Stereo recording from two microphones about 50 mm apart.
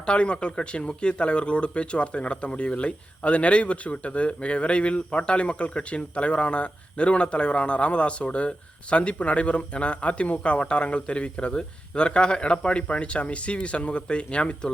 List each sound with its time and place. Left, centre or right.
0.0 s speech: left